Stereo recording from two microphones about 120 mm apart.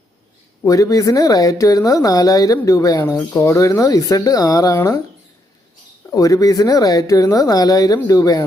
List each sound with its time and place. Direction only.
0.6 s speech: 30° left (ahead or behind)
6.1 s speech: 30° left (ahead or behind)